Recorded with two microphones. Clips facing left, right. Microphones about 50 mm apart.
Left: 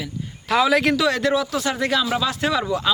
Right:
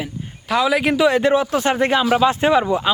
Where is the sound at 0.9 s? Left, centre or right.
Right.